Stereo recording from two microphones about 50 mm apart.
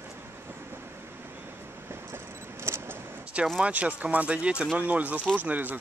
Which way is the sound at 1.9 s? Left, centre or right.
Right.